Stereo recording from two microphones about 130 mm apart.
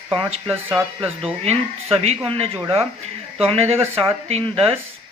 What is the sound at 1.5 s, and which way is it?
Speech, 50° right (ahead or behind).